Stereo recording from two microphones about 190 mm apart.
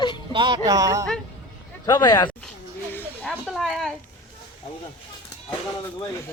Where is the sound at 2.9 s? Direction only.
10° left (ahead or behind).